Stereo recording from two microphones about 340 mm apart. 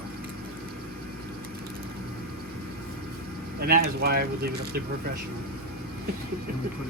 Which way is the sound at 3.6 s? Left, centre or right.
Right.